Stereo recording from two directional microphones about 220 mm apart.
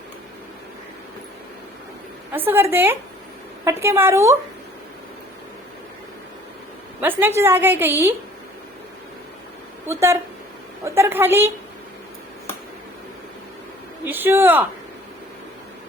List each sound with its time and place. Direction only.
2.3 s a woman's voice: 10° right (ahead or behind)
7.0 s a woman's voice: 10° right (ahead or behind)
9.8 s a woman's voice: 10° right (ahead or behind)
14.0 s speech: 10° right (ahead or behind)